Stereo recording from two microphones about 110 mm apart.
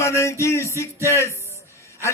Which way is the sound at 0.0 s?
25° left (ahead or behind).